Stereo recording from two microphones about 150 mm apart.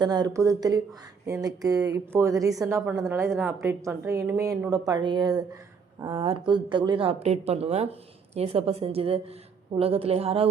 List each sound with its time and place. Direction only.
0.0 s a woman's voice: 25° right (ahead or behind)